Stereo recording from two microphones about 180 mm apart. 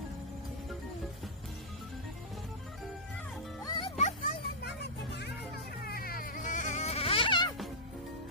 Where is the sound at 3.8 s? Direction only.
40° left (ahead or behind).